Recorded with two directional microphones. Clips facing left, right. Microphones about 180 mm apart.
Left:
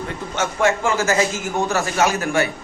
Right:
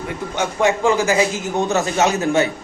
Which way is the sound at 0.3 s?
15° right (ahead or behind).